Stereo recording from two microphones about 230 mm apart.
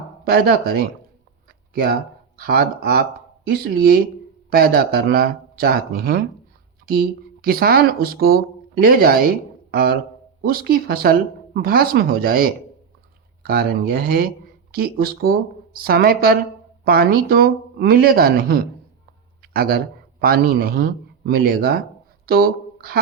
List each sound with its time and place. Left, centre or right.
0.3 s speech: right